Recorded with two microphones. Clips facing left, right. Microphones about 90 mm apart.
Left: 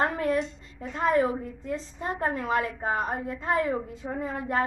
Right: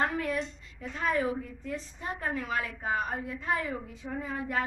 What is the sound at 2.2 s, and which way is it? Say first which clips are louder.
A woman's voice: left 6 dB; 35° left (ahead or behind).